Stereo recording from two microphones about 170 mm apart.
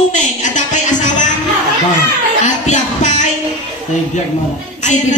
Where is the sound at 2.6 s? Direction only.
45° left (ahead or behind).